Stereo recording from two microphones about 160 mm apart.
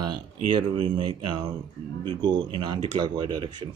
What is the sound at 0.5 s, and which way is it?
Speech, 30° right (ahead or behind).